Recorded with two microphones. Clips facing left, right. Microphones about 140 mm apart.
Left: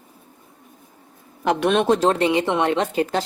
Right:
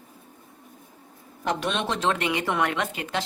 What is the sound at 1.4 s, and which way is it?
Speech, 65° left (ahead or behind).